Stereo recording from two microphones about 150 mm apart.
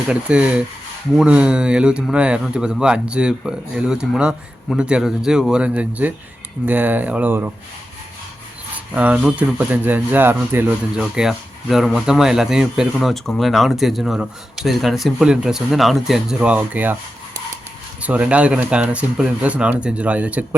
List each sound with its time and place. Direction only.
0.1 s speech: 5° right (ahead or behind)
9.0 s speech: 5° right (ahead or behind)
11.0 s speech: 5° right (ahead or behind)
18.0 s speech: 10° right (ahead or behind)